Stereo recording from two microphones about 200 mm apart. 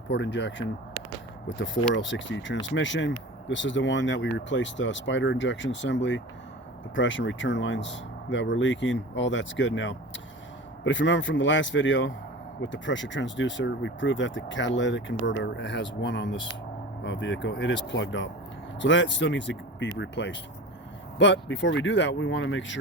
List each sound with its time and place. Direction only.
0.1 s speech: 60° left (ahead or behind)